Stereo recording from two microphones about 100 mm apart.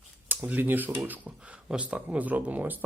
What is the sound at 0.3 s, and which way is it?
Speech, 20° right (ahead or behind).